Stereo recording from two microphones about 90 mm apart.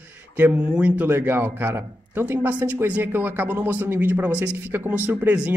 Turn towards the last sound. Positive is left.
turn(degrees=-15)  # may be behind; listen again after turning